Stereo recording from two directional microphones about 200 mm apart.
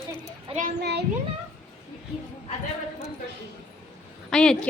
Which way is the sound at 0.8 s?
55° right (ahead or behind).